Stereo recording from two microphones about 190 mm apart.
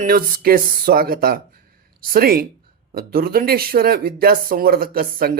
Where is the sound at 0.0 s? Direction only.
50° right (ahead or behind).